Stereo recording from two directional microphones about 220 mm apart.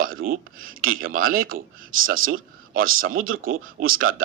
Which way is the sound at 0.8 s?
65° right (ahead or behind).